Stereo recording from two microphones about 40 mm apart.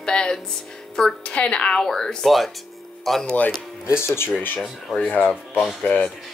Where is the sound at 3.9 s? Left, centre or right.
Left.